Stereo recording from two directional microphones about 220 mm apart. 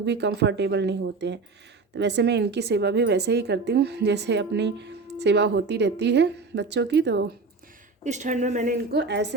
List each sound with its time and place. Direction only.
0.0 s speech: 50° right (ahead or behind)
8.0 s a woman's voice: 35° right (ahead or behind); by 9.3 s 50° right (ahead or behind)